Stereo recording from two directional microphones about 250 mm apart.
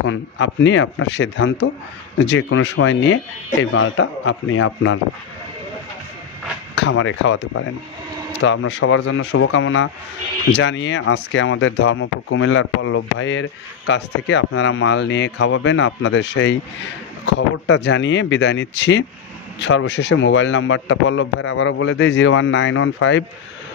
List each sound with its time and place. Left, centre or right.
0.0 s speech: left
6.7 s speech: left